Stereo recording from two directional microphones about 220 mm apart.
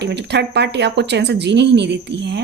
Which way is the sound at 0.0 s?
50° right (ahead or behind).